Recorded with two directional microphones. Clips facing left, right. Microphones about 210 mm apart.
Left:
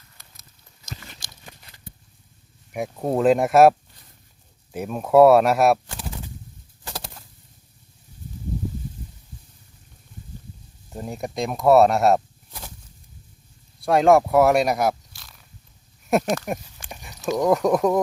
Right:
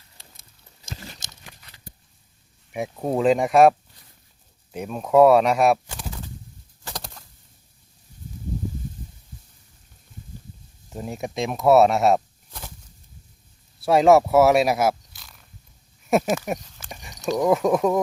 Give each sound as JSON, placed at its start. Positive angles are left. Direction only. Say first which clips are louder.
{"t": 0.9, "sound": "crunch", "louder": "right 2 dB", "side_deg": -25}
{"t": 2.7, "sound": "speech", "louder": "left 1 dB", "side_deg": 0}
{"t": 6.8, "sound": "a sound", "louder": "left 1 dB", "side_deg": 5}
{"t": 10.8, "sound": "speech", "louder": "even", "side_deg": 0}
{"t": 13.8, "sound": "speech", "louder": "right 1 dB", "side_deg": 0}
{"t": 16.7, "sound": "a sound", "louder": "even", "side_deg": 5}